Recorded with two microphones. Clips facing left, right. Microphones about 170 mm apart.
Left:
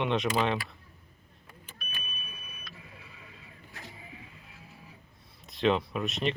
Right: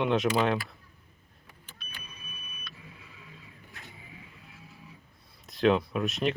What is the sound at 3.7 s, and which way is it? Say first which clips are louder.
Vehicle: left 4 dB; 40° left (ahead or behind).